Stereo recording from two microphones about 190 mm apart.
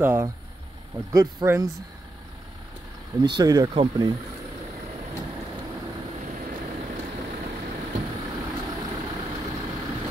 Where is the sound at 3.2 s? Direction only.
20° right (ahead or behind).